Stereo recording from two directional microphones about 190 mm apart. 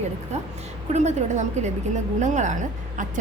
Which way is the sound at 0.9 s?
40° right (ahead or behind).